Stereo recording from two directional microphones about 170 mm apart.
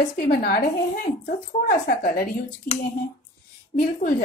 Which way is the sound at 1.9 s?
55° left (ahead or behind).